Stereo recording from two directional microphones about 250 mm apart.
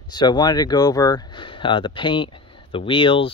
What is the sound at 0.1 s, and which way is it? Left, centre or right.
Speech, centre.